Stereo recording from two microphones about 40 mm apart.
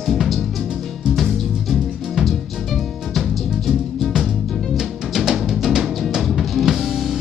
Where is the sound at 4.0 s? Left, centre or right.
Centre.